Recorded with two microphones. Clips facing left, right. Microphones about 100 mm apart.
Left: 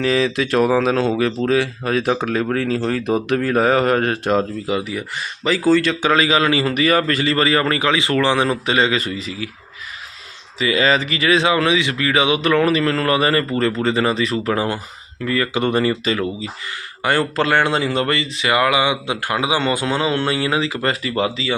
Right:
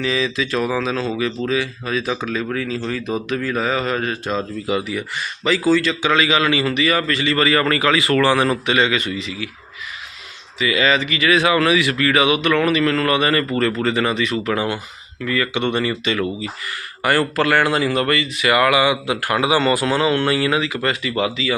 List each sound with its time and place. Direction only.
0.0 s speech: 55° left (ahead or behind)
5.7 s speech: 60° left (ahead or behind)
6.0 s speech: 40° left (ahead or behind)
7.3 s speech: 30° left (ahead or behind)
8.6 s speech: 30° left (ahead or behind)
10.6 s speech: 35° left (ahead or behind)
17.0 s speech: 25° left (ahead or behind)